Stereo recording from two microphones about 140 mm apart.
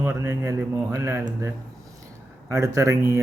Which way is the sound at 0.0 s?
20° right (ahead or behind).